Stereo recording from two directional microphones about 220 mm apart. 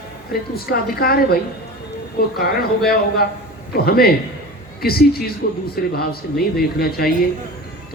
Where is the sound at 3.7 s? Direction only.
45° left (ahead or behind).